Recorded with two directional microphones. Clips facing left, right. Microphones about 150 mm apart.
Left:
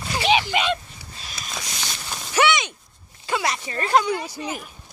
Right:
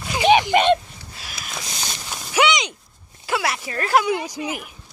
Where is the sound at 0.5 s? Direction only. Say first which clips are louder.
Right 7 dB; 55° right (ahead or behind).